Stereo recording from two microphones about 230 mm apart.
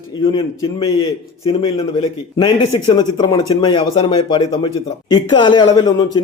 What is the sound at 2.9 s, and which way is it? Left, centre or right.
A man's voice, centre.